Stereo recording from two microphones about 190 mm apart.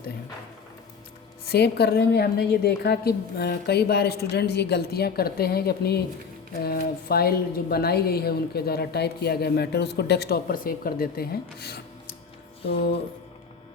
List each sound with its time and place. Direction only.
1.5 s a woman's voice: 60° left (ahead or behind)